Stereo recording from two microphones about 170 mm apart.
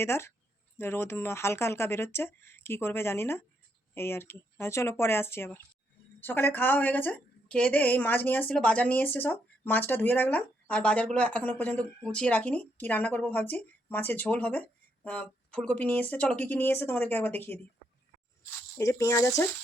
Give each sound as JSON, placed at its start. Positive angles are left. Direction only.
{"t": 0.0, "sound": "a woman's voice", "side_deg": 15}
{"t": 18.8, "sound": "a woman's voice", "side_deg": 20}